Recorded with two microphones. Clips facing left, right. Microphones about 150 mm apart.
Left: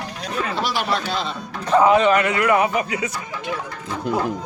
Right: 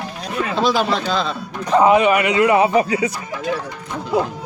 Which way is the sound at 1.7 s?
15° right (ahead or behind).